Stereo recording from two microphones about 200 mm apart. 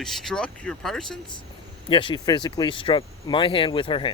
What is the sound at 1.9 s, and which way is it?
Speech, 25° left (ahead or behind).